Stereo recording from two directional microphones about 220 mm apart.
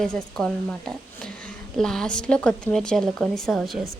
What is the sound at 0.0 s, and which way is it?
A woman's voice, 5° left (ahead or behind).